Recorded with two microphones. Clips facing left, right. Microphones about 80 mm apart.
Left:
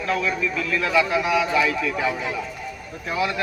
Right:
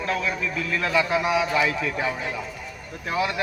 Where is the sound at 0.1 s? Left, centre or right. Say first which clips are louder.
Left 4 dB; right.